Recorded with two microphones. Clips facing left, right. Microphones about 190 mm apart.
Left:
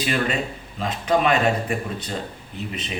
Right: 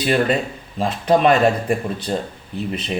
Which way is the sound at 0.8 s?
35° right (ahead or behind).